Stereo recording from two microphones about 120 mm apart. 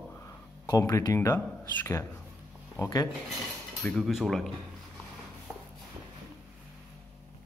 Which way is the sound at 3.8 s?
5° left (ahead or behind).